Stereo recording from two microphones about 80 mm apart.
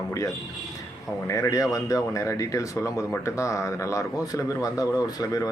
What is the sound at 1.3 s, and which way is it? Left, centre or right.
Speech, left.